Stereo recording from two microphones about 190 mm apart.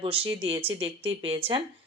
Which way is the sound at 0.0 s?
30° right (ahead or behind).